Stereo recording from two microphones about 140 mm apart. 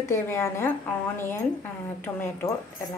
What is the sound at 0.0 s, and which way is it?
A woman's voice, 20° left (ahead or behind).